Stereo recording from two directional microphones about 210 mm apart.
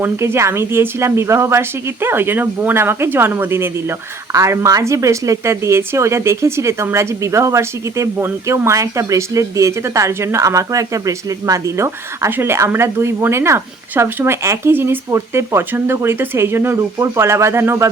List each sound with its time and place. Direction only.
0.0 s speech: 10° right (ahead or behind)